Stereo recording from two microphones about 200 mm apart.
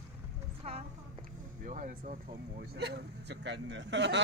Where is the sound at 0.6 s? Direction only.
35° right (ahead or behind).